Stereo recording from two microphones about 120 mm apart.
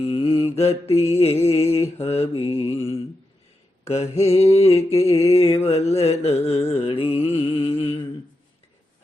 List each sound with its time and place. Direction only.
0.0 s mantra: 55° left (ahead or behind)
1.2 s carnatic music: 55° left (ahead or behind)
3.8 s carnatic music: 65° left (ahead or behind)